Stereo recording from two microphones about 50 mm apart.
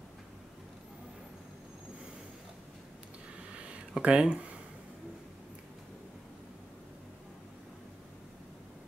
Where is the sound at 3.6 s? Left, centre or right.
Right.